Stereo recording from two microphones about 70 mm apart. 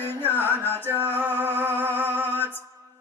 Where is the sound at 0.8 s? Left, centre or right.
Right.